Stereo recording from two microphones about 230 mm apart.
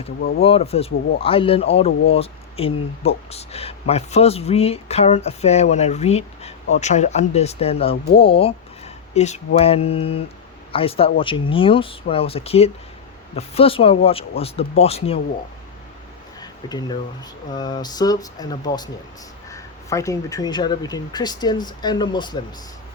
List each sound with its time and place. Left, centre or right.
0.2 s speech: left
0.4 s speech: left
16.4 s a sound: centre
17.5 s speech: centre